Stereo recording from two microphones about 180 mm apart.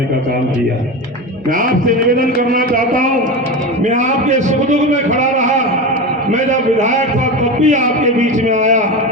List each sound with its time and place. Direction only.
1.5 s a man's voice: 50° right (ahead or behind)